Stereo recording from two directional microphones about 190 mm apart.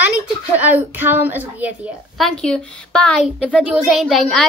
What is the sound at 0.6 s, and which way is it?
A woman's voice, 10° right (ahead or behind).